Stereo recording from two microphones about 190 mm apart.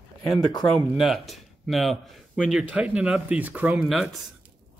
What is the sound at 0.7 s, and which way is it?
Speech, centre (ahead or behind).